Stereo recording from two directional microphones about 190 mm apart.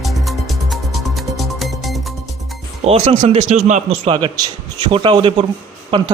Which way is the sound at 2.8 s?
35° right (ahead or behind).